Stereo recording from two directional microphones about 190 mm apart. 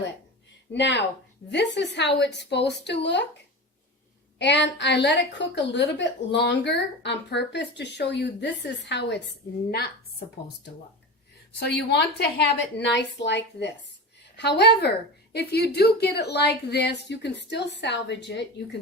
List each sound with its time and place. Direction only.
0.7 s a woman's voice: 65° left (ahead or behind)
4.4 s a woman's voice: 65° left (ahead or behind)
11.6 s a woman's voice: 60° left (ahead or behind)